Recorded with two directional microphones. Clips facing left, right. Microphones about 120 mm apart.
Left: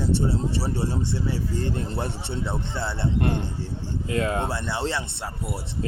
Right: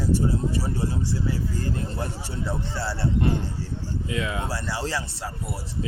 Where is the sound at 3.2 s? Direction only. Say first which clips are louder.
Even; 60° left (ahead or behind).